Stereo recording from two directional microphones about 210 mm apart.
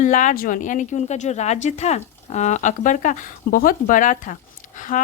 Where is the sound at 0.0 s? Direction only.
35° left (ahead or behind).